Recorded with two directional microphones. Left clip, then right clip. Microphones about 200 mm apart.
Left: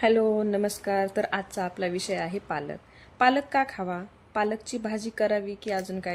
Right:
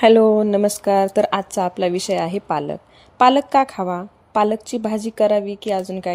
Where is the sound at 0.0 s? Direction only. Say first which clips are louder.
Right 10 dB; 35° right (ahead or behind).